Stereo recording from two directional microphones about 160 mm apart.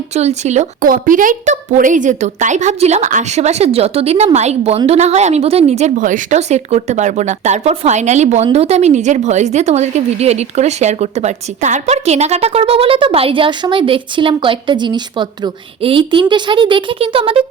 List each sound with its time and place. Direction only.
0.1 s a woman's voice: 45° right (ahead or behind)